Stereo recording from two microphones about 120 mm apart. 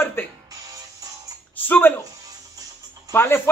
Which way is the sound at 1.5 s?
15° left (ahead or behind).